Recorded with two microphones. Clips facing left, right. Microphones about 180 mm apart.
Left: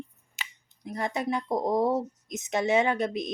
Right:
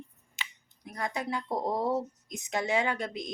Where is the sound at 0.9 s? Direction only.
25° left (ahead or behind).